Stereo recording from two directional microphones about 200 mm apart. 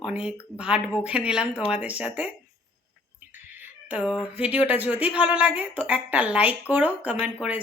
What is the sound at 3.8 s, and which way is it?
Speech, 5° right (ahead or behind).